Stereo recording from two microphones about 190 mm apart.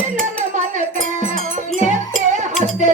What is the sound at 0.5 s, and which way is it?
Music, 40° right (ahead or behind).